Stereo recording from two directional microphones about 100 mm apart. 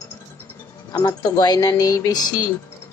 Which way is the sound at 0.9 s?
40° left (ahead or behind).